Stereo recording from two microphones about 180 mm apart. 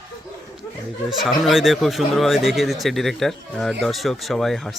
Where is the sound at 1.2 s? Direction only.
Centre (ahead or behind).